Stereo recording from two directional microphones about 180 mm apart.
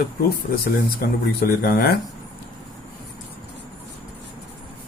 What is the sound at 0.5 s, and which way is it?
Speech, 55° left (ahead or behind).